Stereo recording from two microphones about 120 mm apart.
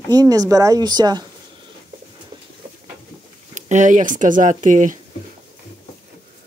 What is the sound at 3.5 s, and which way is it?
Speech, 90° right.